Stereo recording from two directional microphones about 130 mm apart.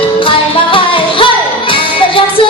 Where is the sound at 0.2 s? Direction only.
45° left (ahead or behind).